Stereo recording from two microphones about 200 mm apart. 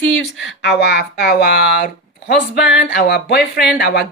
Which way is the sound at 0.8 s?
55° left (ahead or behind).